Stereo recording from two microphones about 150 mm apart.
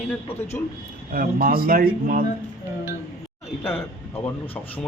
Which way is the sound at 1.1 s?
70° right (ahead or behind).